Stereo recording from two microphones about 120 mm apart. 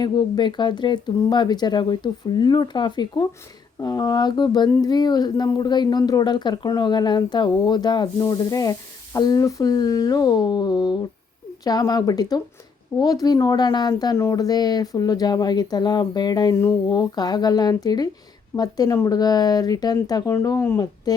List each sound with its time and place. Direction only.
0.0 s speech: 40° left (ahead or behind)
8.2 s sizzle: 30° left (ahead or behind)
9.1 s speech: 30° left (ahead or behind)